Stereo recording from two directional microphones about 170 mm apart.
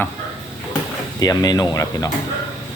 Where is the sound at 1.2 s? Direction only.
25° left (ahead or behind).